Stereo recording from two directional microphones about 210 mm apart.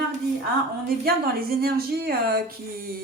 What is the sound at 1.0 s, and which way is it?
A woman's voice, 45° right (ahead or behind).